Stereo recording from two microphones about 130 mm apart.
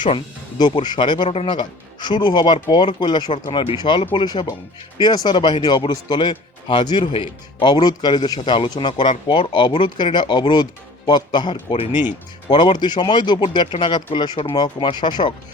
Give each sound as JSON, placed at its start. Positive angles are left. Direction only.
{"t": 0.6, "sound": "a man's voice", "side_deg": 35}